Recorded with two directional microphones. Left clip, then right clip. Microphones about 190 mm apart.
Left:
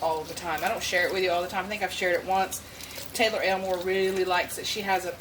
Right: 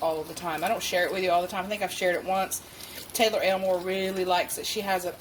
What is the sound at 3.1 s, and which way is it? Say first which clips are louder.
Speech: right 1 dB; 40° right (ahead or behind).